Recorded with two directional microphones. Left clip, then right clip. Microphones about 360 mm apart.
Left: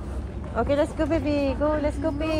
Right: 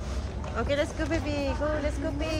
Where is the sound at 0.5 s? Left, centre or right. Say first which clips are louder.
Left 5 dB; centre.